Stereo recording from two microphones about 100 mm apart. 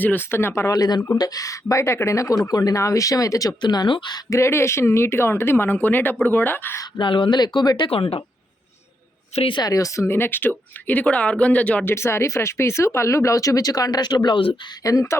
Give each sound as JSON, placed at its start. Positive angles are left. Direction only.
{"t": 0.0, "sound": "speech", "side_deg": 20}
{"t": 0.7, "sound": "speech", "side_deg": 40}
{"t": 4.3, "sound": "speech", "side_deg": 30}
{"t": 7.0, "sound": "speech", "side_deg": 55}
{"t": 7.9, "sound": "speech", "side_deg": 70}
{"t": 9.3, "sound": "speech", "side_deg": 75}
{"t": 9.6, "sound": "speech", "side_deg": 35}
{"t": 11.9, "sound": "speech", "side_deg": 25}
{"t": 14.8, "sound": "speech", "side_deg": 35}